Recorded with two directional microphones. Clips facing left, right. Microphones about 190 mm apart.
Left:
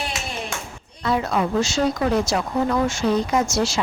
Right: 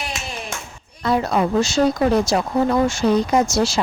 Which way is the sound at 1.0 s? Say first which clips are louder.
Right 3 dB; 40° right (ahead or behind).